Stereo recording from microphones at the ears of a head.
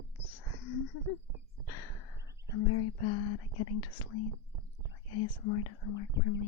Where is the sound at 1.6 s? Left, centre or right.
Left.